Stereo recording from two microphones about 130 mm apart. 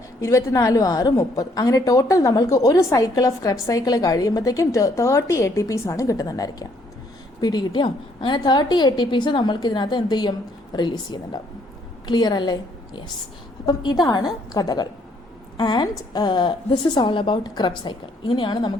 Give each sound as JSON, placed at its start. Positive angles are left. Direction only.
{"t": 0.2, "sound": "a woman's voice", "side_deg": 25}